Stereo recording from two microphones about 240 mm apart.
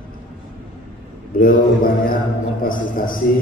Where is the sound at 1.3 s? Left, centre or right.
Left.